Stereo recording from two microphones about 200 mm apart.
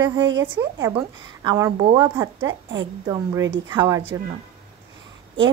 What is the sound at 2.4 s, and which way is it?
Speech, 70° right (ahead or behind).